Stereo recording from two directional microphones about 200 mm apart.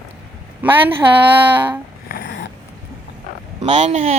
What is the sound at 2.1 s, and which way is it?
Dog, 50° left (ahead or behind).